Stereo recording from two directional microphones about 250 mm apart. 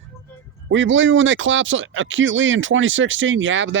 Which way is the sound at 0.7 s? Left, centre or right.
Right.